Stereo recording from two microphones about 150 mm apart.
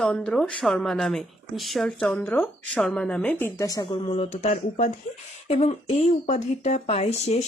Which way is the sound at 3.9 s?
35° left (ahead or behind).